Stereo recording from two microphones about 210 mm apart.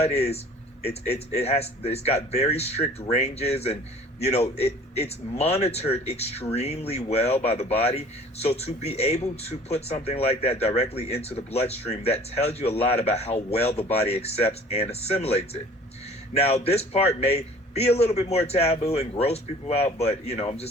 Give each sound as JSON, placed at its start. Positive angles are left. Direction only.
{"t": 0.0, "sound": "a man's voice", "side_deg": 30}
{"t": 16.6, "sound": "a man's voice", "side_deg": 30}